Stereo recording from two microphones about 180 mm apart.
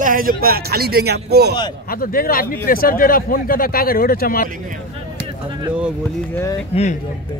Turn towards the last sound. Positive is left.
turn(degrees=35)  # may be behind; listen again after turning